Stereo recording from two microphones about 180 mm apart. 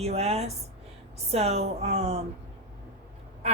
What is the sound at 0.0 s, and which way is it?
Speech, 35° right (ahead or behind).